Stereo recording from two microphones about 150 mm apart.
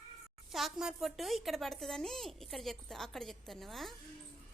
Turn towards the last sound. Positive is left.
turn(degrees=0)  # may be behind; listen again after turning